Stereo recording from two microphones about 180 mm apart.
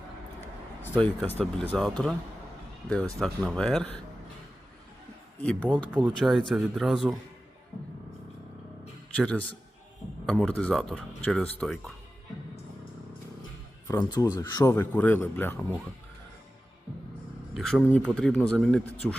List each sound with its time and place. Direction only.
0.8 s a man's voice: 10° left (ahead or behind)
5.4 s a man's voice: 10° left (ahead or behind)
9.1 s a man's voice: 5° left (ahead or behind)
13.8 s speech: 20° left (ahead or behind)
17.5 s a man's voice: centre (ahead or behind)